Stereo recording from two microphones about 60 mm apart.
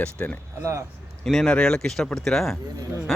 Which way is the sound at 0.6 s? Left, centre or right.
Right.